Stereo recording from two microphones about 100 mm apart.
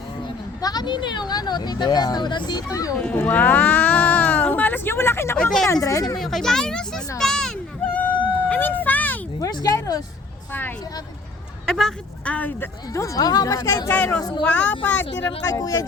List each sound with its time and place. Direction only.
0.6 s speech: 40° left (ahead or behind)
3.0 s a sound: 10° left (ahead or behind)
5.4 s speech: 5° left (ahead or behind)
5.6 s a woman's voice: 30° left (ahead or behind)
6.1 s speech: 5° left (ahead or behind)
7.2 s a sound: 5° left (ahead or behind)
8.4 s a sound: 20° left (ahead or behind)
9.4 s a woman's voice: 40° left (ahead or behind)
11.6 s speech: 5° left (ahead or behind)
12.9 s a woman's voice: 35° left (ahead or behind)
13.9 s speech: 15° left (ahead or behind)
15.4 s a woman's voice: 35° left (ahead or behind)